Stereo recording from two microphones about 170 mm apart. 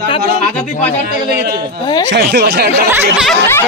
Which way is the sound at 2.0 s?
80° right.